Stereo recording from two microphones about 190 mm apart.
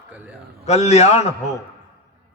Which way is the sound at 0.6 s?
35° left (ahead or behind).